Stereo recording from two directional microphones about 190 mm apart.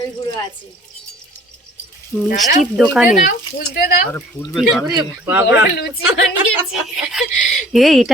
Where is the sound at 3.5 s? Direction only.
55° left (ahead or behind).